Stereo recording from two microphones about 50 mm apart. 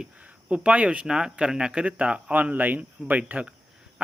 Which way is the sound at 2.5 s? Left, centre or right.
Right.